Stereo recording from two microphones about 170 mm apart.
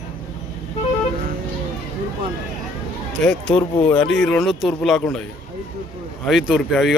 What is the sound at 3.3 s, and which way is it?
A man's voice, 5° left (ahead or behind).